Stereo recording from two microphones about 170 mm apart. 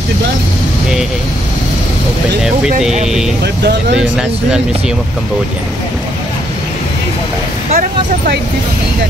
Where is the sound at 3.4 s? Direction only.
70° right (ahead or behind).